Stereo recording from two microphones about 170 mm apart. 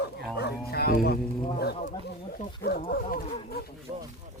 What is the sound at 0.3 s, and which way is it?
Music, 70° left (ahead or behind).